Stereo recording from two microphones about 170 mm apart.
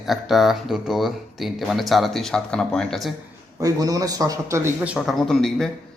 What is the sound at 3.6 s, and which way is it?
A man's voice, 20° right (ahead or behind).